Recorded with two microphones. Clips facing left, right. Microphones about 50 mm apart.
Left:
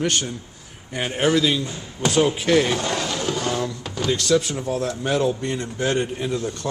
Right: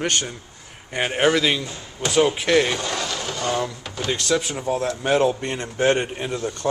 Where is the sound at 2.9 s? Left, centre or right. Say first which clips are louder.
Left 3 dB; centre.